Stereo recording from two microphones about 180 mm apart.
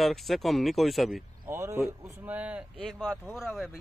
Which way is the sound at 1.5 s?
15° right (ahead or behind).